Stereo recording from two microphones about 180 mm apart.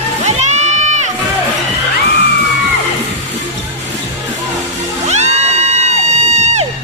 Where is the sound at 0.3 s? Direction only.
40° right (ahead or behind).